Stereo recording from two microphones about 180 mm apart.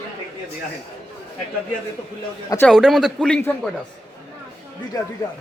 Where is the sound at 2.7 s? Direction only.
Centre (ahead or behind).